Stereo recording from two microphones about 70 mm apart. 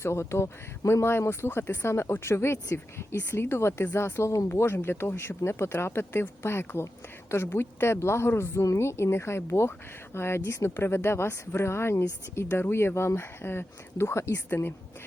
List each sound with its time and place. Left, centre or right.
0.0 s speech: left
4.4 s speech: left